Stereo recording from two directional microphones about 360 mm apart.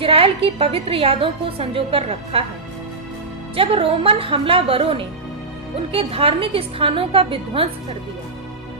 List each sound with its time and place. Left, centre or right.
0.0 s a woman's voice: centre
3.5 s a woman's voice: centre